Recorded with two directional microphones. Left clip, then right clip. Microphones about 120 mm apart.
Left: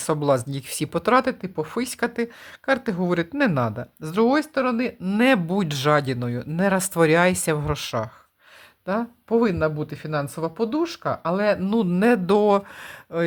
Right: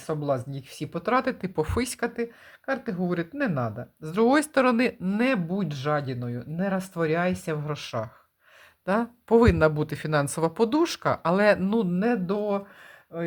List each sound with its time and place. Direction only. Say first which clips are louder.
0.0 s speech: left 7 dB; 45° left (ahead or behind)
1.4 s speech: even; 5° right (ahead or behind)
2.0 s speech: left 4 dB; 25° left (ahead or behind)
4.5 s speech: right 1 dB; 20° right (ahead or behind)
5.0 s speech: left 6 dB; 20° left (ahead or behind)
5.5 s speech: left 7 dB; 45° left (ahead or behind); by 8.1 s 25° left (ahead or behind)
8.9 s speech: even; centre (ahead or behind)
9.3 s speech: right 2 dB; 15° right (ahead or behind)
11.1 s speech: right 1 dB; 5° right (ahead or behind)
11.9 s speech: left 6 dB; 35° left (ahead or behind)
12.2 s speech: left 9 dB; 55° left (ahead or behind)